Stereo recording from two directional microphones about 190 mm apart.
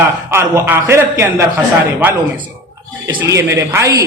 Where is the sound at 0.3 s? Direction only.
15° right (ahead or behind).